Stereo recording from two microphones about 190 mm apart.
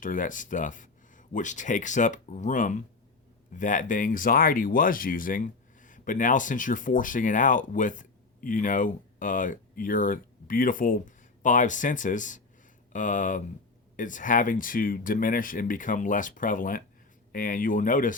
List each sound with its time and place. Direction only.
0.0 s speech: 45° left (ahead or behind)